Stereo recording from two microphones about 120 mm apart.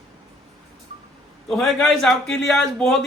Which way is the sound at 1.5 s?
5° left (ahead or behind).